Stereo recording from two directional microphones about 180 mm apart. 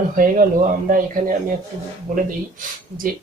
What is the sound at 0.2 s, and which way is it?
A man's voice, 50° right (ahead or behind).